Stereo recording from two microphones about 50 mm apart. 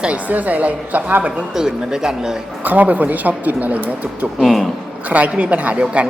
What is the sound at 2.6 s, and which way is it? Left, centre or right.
A woman's voice, right.